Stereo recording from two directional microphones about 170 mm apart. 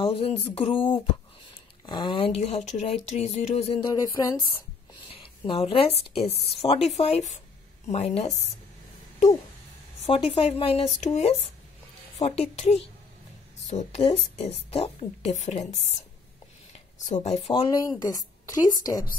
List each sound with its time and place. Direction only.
0.0 s a woman's voice: 35° left (ahead or behind)
3.9 s speech: 20° left (ahead or behind)
5.5 s a woman's voice: 35° left (ahead or behind)
7.0 s a woman's voice: 40° left (ahead or behind)
10.0 s a woman's voice: 35° left (ahead or behind)
16.7 s a sound: 40° left (ahead or behind)
17.5 s speech: 25° left (ahead or behind)